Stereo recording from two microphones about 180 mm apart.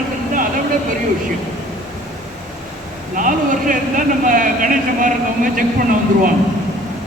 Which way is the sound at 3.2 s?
45° right (ahead or behind).